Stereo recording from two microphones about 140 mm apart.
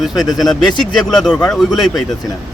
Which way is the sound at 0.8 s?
30° left (ahead or behind).